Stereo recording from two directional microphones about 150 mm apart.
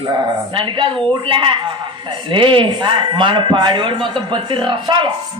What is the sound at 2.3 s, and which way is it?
Speech, 35° right (ahead or behind).